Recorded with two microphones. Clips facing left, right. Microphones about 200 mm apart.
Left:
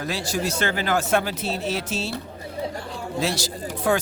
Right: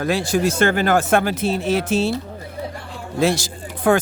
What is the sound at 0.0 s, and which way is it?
Speech, 55° right (ahead or behind).